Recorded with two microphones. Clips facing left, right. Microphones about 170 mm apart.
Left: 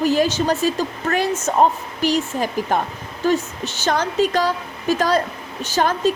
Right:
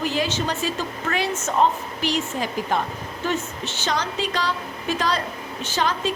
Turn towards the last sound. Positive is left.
turn(degrees=45)  # may be behind; listen again after turning